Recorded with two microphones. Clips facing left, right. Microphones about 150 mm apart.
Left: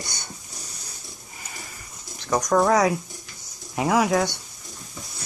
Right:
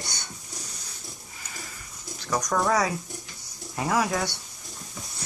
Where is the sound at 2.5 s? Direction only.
20° left (ahead or behind).